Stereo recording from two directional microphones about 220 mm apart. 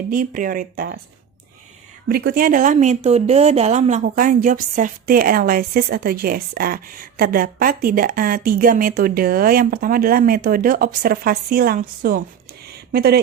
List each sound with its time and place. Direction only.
0.1 s speech: 40° right (ahead or behind)
2.0 s speech: 45° right (ahead or behind)
12.6 s a sound: 45° right (ahead or behind)